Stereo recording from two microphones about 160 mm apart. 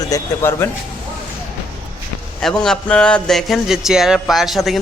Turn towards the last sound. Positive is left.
turn(degrees=0)  # may be behind; listen again after turning